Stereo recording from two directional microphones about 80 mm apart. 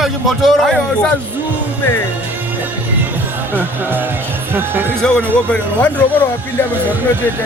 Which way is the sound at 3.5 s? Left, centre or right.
Right.